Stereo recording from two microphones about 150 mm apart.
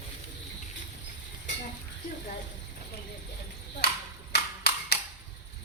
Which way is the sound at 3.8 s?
90° left.